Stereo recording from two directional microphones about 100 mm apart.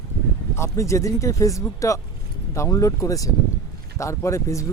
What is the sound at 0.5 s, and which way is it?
Speech, 30° left (ahead or behind).